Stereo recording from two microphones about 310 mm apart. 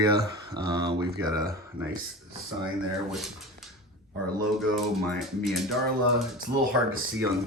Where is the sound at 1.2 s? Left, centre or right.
Centre.